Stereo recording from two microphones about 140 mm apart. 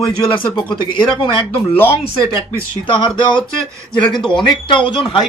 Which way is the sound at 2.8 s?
35° left (ahead or behind).